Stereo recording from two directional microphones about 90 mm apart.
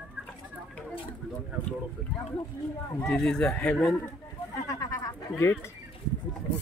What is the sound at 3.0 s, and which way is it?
Speech, 10° left (ahead or behind).